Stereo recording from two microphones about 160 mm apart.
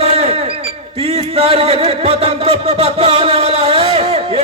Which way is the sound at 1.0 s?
40° right (ahead or behind).